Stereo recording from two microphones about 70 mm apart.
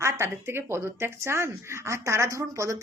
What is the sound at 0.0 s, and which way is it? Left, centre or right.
Speech, right.